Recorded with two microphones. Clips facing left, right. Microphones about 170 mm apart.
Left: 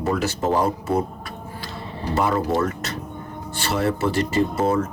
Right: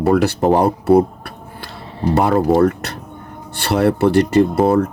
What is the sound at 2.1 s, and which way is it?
Speech, 60° right (ahead or behind).